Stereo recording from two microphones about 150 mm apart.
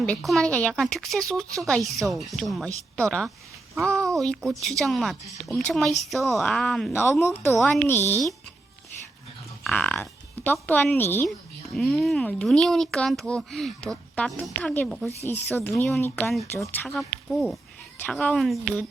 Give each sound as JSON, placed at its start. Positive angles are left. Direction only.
{"t": 0.0, "sound": "a child's voice", "side_deg": 5}
{"t": 6.9, "sound": "a woman's voice", "side_deg": 15}
{"t": 9.6, "sound": "a woman's voice", "side_deg": 10}
{"t": 11.3, "sound": "a child's voice", "side_deg": 5}
{"t": 15.3, "sound": "a woman's voice", "side_deg": 15}